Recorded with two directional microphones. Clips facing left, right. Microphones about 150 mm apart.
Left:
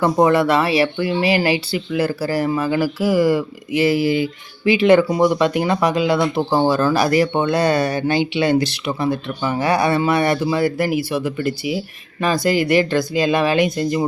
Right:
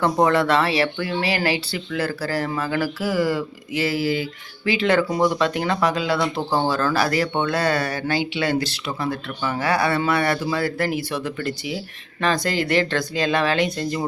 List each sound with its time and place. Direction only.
0.0 s speech: 10° left (ahead or behind)